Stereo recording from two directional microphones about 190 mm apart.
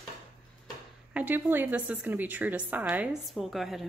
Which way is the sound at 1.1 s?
10° right (ahead or behind).